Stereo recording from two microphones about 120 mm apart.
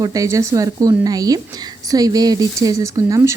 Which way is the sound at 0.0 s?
30° right (ahead or behind).